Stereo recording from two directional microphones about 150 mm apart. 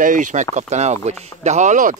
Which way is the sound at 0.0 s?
60° right (ahead or behind).